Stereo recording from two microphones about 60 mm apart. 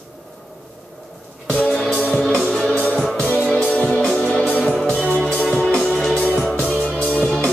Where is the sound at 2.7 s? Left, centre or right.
Left; by 6.8 s centre.